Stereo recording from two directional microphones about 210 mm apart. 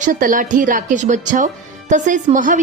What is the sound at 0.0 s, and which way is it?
A woman's voice, 40° right (ahead or behind).